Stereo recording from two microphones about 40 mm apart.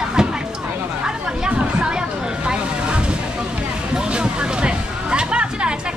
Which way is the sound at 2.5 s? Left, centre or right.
Right.